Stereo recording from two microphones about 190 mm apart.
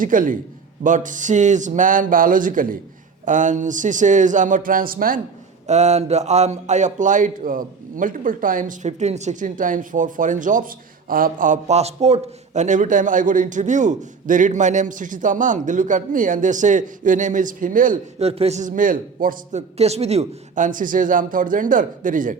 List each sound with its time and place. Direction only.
0.0 s a man's voice: 45° right (ahead or behind)
5.6 s speech: 35° right (ahead or behind)